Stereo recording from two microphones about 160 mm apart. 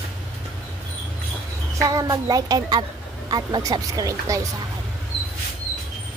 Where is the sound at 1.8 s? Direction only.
20° right (ahead or behind).